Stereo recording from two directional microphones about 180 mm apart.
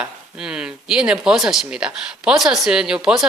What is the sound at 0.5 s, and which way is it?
Speech, 5° right (ahead or behind).